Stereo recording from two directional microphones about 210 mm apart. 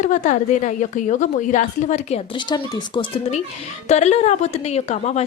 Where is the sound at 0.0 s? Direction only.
35° left (ahead or behind).